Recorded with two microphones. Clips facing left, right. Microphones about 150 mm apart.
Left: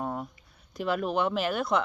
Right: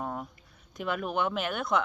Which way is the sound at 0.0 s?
5° left (ahead or behind).